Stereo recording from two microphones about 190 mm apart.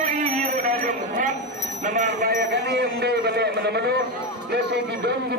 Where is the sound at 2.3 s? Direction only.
60° right (ahead or behind).